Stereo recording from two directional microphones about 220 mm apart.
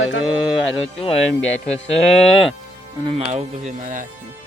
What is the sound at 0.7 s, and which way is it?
Speech, 25° left (ahead or behind).